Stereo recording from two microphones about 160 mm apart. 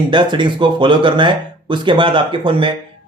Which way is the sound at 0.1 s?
30° right (ahead or behind).